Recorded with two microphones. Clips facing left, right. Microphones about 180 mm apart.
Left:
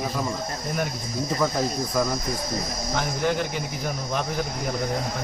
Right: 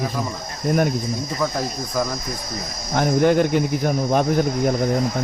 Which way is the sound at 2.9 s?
55° right (ahead or behind).